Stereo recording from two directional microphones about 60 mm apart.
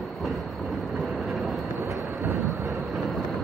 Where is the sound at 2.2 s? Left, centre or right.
Right.